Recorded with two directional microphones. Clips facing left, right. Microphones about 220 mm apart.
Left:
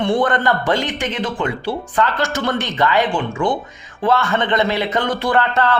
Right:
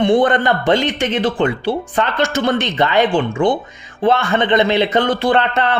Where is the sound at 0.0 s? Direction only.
20° right (ahead or behind).